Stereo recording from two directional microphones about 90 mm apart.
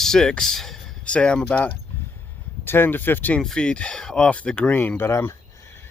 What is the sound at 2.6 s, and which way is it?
Speech, 25° left (ahead or behind).